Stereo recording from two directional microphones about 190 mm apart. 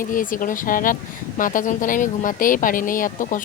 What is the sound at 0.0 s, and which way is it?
Speech, 45° left (ahead or behind).